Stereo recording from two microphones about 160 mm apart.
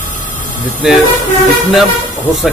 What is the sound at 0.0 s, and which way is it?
Vehicle, 55° left (ahead or behind).